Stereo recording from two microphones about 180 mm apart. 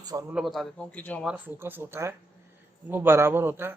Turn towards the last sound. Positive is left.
turn(degrees=-15)  # may be behind; listen again after turning